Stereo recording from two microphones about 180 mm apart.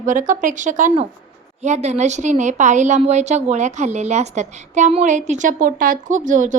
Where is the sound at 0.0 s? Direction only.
45° right (ahead or behind).